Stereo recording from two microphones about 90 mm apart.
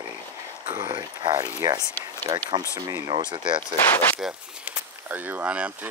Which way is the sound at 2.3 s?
90° right.